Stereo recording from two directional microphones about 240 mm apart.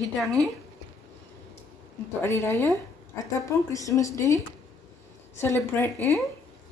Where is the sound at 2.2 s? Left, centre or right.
Centre.